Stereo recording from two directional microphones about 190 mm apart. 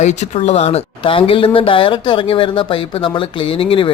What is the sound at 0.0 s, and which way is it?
Speech, 35° left (ahead or behind).